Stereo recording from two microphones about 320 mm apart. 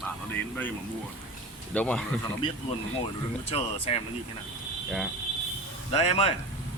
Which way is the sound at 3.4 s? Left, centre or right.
Centre.